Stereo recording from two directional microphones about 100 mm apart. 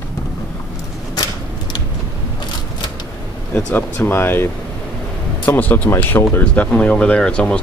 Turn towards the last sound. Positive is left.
turn(degrees=10)  # may be behind; listen again after turning